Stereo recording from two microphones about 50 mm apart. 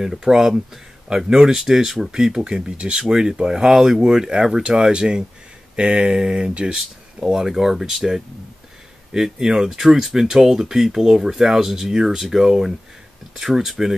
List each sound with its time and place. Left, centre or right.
0.0 s speech: centre